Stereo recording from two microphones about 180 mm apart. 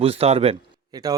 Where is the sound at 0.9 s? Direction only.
20° right (ahead or behind).